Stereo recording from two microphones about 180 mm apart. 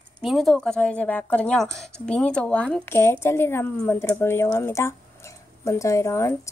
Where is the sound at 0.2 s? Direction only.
Centre (ahead or behind).